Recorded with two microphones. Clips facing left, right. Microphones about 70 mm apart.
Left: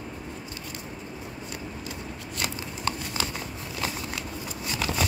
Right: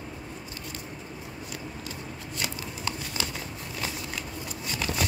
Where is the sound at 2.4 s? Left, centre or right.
Left.